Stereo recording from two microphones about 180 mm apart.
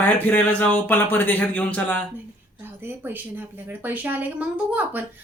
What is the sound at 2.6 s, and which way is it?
A woman's voice, 10° right (ahead or behind).